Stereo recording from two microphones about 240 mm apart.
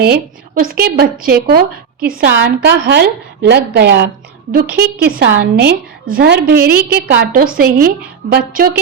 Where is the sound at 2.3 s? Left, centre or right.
Right.